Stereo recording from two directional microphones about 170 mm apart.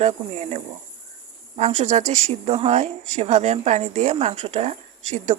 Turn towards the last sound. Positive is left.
turn(degrees=-45)  # may be behind; listen again after turning